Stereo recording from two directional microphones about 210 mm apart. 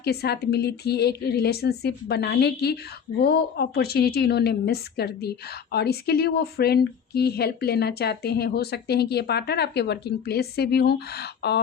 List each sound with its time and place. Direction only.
0.0 s a woman's voice: 50° left (ahead or behind)